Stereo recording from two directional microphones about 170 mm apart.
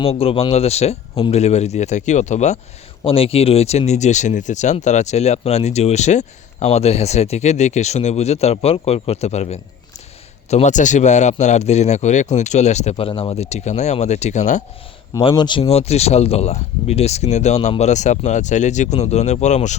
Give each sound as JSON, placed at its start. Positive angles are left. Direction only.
{"t": 0.0, "sound": "speech", "side_deg": 35}
{"t": 3.0, "sound": "a man's voice", "side_deg": 35}
{"t": 15.2, "sound": "speech", "side_deg": 30}